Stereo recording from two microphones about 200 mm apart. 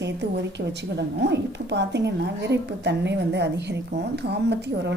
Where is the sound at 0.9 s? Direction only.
60° right (ahead or behind).